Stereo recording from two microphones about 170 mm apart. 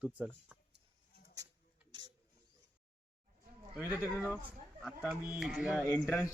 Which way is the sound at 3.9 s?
15° right (ahead or behind).